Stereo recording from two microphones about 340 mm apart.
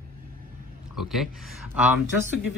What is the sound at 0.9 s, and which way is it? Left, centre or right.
Speech, centre.